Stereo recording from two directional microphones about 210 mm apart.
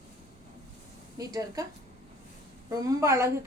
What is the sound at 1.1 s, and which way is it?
Speech, 15° right (ahead or behind).